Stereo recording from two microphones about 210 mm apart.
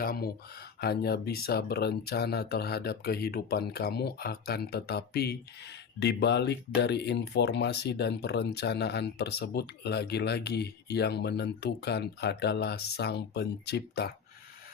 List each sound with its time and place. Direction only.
0.0 s speech: 45° left (ahead or behind)